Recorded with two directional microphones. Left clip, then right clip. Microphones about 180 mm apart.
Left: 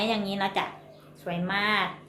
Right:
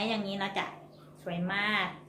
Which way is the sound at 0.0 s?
25° left (ahead or behind).